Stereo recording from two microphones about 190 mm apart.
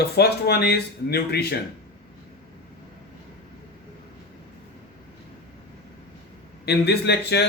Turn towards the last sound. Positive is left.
turn(degrees=60)  # may be behind; listen again after turning